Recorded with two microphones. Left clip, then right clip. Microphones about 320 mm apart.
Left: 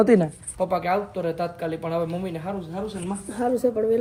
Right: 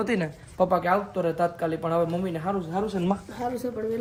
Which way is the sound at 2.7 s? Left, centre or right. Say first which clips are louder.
Right 3 dB; right.